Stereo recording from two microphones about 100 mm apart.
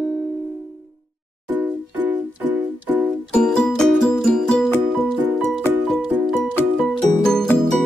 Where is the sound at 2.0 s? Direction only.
15° right (ahead or behind).